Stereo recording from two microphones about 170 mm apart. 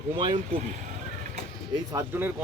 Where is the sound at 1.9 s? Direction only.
10° right (ahead or behind).